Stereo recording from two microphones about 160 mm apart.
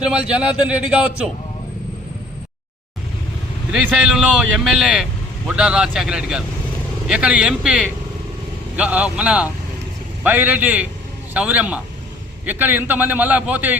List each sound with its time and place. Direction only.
0.0 s a man's voice: 5° right (ahead or behind)
3.7 s a man's voice: 5° right (ahead or behind)